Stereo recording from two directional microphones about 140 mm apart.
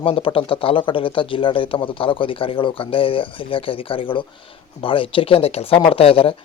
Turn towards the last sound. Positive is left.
turn(degrees=40)  # may be behind; listen again after turning